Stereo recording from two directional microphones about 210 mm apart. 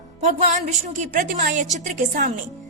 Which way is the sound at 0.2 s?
35° right (ahead or behind).